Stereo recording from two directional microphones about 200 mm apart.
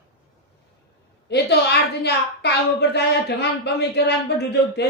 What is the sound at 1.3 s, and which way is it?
A woman's voice, 60° left (ahead or behind).